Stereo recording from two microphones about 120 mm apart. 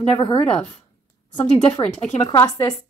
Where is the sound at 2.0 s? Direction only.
75° left (ahead or behind).